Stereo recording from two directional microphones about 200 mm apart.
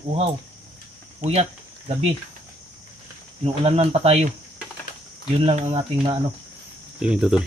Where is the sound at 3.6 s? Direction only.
30° right (ahead or behind).